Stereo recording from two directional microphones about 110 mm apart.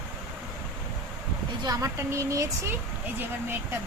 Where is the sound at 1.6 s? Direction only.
35° right (ahead or behind).